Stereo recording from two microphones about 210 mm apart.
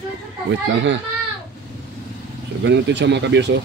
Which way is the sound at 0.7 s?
60° right (ahead or behind).